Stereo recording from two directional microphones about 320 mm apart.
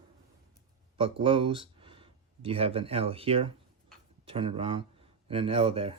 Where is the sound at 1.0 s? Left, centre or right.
Centre.